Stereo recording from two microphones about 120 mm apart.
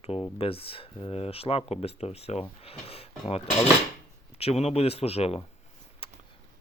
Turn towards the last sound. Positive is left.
turn(degrees=55)  # may be behind; listen again after turning